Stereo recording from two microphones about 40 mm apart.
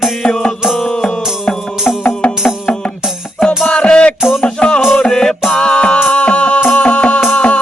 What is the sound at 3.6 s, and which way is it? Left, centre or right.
Music, left.